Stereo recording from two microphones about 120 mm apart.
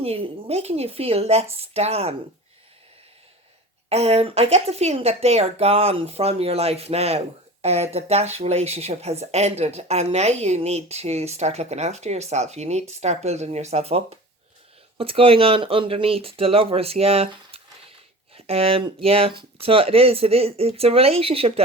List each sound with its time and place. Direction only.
0.0 s speech: 55° right (ahead or behind)
3.8 s speech: 60° right (ahead or behind)